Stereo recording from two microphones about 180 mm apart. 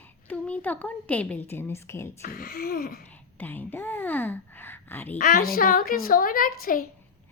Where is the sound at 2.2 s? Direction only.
55° left (ahead or behind).